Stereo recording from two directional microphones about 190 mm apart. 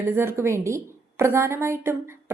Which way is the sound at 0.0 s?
10° right (ahead or behind).